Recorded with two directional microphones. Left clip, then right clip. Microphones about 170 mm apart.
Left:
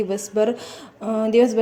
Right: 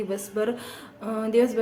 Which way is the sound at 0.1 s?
25° left (ahead or behind).